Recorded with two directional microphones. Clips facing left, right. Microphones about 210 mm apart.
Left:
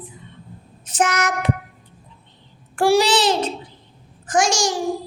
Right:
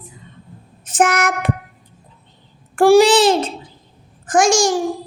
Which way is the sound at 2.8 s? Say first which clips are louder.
Right 6 dB; 50° right (ahead or behind).